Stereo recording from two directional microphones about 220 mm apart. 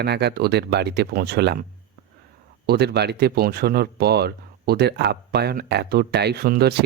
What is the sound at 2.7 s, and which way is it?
Speech, 50° right (ahead or behind).